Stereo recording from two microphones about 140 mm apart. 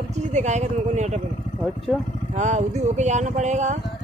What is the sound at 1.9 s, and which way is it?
Speech, 5° left (ahead or behind).